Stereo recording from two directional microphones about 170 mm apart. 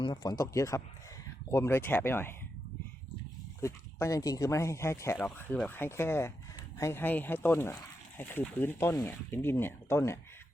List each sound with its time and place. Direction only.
0.0 s speech: 25° left (ahead or behind)
3.6 s speech: 15° left (ahead or behind)